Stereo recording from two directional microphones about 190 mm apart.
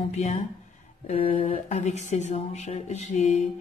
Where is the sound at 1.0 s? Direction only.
35° left (ahead or behind).